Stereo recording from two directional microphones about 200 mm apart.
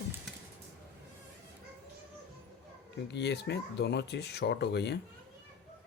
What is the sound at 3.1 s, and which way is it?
Speech, 60° left (ahead or behind).